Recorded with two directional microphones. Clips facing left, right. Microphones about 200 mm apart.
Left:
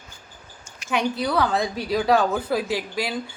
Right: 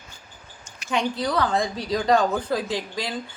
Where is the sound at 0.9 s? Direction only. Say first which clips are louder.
Left 1 dB; 10° left (ahead or behind).